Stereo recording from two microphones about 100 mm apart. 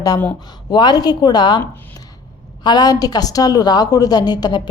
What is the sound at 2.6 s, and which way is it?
A woman's voice, 45° left (ahead or behind).